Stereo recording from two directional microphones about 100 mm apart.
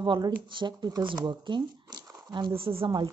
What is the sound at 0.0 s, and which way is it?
Speech, 55° right (ahead or behind).